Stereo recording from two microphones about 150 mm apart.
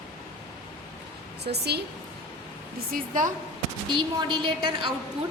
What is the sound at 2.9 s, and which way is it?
Speech, 60° right (ahead or behind).